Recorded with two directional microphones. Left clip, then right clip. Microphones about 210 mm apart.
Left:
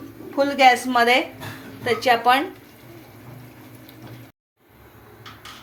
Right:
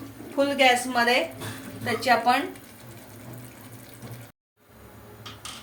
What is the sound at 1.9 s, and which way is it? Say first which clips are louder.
Speech: left 4 dB; 30° left (ahead or behind).